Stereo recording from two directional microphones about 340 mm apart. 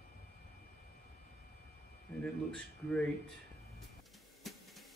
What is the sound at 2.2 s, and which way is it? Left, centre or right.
Speech, centre.